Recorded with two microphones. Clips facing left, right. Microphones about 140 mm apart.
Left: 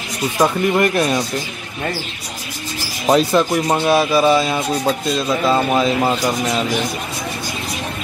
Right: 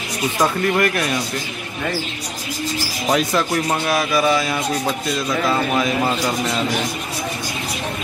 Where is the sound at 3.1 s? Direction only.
30° left (ahead or behind).